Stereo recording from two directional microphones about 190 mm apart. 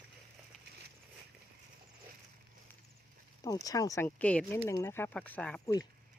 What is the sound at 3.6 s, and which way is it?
Speech, 20° left (ahead or behind).